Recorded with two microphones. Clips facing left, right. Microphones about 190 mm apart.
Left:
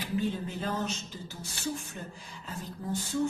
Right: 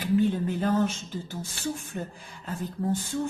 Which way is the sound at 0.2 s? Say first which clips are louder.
Right 7 dB; 55° right (ahead or behind).